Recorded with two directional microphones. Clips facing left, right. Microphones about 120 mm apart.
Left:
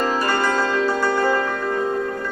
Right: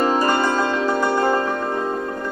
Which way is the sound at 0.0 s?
15° right (ahead or behind).